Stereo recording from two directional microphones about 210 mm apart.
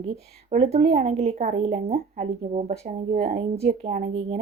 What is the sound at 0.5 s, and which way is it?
A woman's voice, 30° right (ahead or behind).